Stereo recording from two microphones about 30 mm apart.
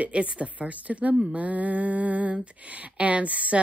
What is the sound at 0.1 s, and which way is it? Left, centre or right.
A woman's voice, right.